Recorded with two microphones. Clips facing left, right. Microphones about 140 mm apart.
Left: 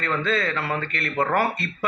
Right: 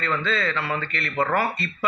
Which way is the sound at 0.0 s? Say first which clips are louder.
Left 1 dB; 45° left (ahead or behind).